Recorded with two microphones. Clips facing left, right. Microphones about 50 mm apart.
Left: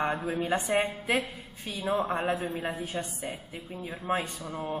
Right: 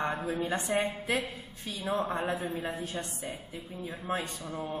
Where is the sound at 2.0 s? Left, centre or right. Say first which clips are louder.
Left 3 dB; left.